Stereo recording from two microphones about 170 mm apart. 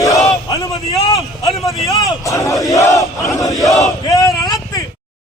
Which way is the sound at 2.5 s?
Centre (ahead or behind).